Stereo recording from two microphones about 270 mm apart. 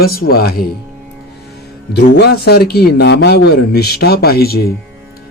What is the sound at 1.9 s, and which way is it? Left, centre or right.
Speech, left.